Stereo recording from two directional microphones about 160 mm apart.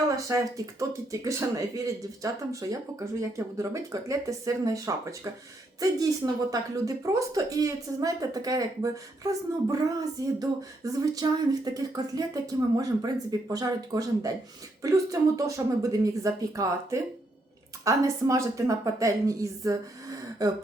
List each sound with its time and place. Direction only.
0.2 s speech: 20° right (ahead or behind)